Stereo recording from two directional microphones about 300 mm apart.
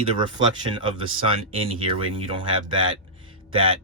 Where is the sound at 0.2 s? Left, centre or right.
Centre.